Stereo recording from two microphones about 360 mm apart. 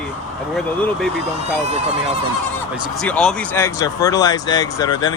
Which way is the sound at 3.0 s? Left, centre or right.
Centre.